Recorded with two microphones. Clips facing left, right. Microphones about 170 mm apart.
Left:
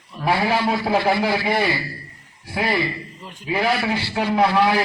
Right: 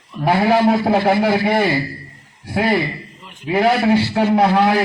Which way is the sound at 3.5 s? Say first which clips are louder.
Right 7 dB; 55° right (ahead or behind).